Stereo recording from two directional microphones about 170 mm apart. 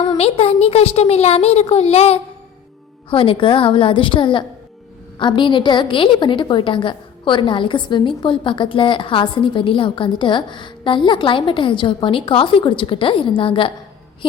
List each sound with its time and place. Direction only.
0.2 s a woman's voice: 35° left (ahead or behind)